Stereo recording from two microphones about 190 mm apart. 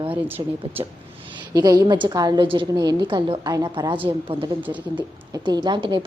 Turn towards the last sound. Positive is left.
turn(degrees=-25)  # may be behind; listen again after turning